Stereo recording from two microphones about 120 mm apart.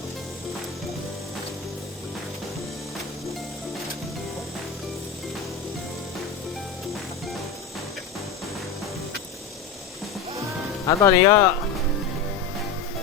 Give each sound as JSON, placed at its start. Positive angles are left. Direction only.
{"t": 10.8, "sound": "speech", "side_deg": 25}